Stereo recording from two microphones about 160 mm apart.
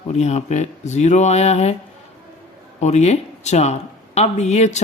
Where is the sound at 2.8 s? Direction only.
45° left (ahead or behind).